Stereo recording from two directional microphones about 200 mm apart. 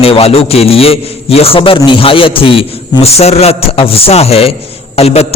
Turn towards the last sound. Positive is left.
turn(degrees=30)  # may be behind; listen again after turning